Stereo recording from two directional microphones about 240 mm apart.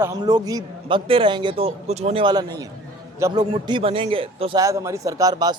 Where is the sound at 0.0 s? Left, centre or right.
Centre.